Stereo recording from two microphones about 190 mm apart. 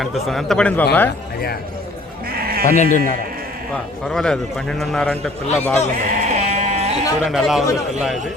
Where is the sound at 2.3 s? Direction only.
50° right (ahead or behind).